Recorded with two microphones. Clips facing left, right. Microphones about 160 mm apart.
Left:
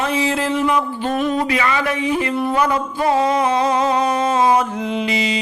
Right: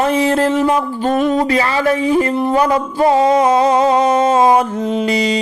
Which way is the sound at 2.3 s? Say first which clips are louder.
Right 4 dB; 30° right (ahead or behind).